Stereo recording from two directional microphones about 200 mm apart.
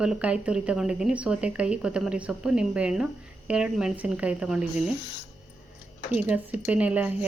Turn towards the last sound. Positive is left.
turn(degrees=-5)  # may be behind; listen again after turning